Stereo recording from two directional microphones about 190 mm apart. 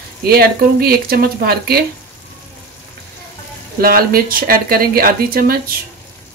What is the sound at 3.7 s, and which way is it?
Speech, 50° right (ahead or behind).